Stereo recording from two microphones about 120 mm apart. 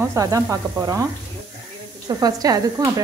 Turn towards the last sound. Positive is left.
turn(degrees=-30)  # may be behind; listen again after turning